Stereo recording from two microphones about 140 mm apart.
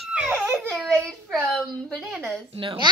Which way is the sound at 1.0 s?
Centre (ahead or behind).